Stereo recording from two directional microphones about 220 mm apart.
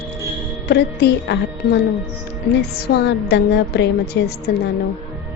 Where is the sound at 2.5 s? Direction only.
50° left (ahead or behind).